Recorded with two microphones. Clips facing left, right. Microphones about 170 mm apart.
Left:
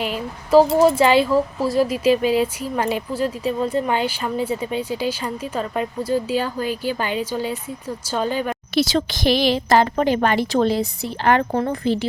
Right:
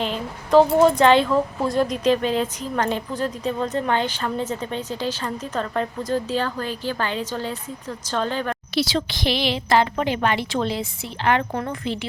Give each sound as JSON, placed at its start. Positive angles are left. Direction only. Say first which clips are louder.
{"t": 0.0, "sound": "speech", "louder": "left 1 dB", "side_deg": 5}
{"t": 8.7, "sound": "speech", "louder": "left 4 dB", "side_deg": 45}